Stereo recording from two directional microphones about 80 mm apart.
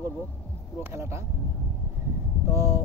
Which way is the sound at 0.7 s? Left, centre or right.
Right.